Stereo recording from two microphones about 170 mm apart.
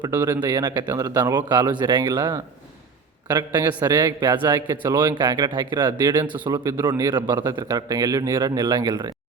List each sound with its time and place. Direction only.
0.0 s speech: 15° right (ahead or behind)
0.5 s a man's voice: 25° right (ahead or behind)